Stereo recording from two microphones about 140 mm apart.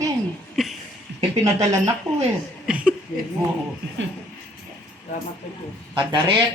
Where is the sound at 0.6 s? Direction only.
Centre (ahead or behind).